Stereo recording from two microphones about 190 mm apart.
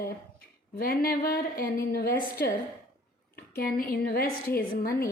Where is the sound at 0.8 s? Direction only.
50° left (ahead or behind).